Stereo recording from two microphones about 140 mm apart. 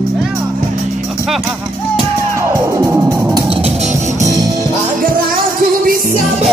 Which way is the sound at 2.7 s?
25° right (ahead or behind).